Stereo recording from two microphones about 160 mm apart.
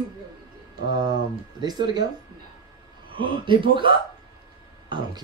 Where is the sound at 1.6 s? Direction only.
25° right (ahead or behind).